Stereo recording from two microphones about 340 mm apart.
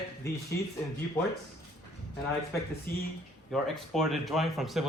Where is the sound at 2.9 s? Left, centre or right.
Left.